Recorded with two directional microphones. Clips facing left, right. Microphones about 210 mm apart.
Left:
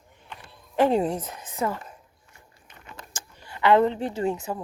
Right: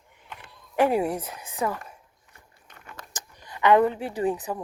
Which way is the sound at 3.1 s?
15° right (ahead or behind).